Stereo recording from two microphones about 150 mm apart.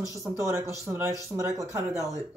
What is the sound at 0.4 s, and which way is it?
Speech, 20° right (ahead or behind).